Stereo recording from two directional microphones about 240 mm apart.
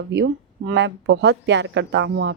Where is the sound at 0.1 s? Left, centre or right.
Right.